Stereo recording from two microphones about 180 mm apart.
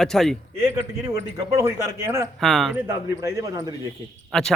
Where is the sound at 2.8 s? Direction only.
15° right (ahead or behind).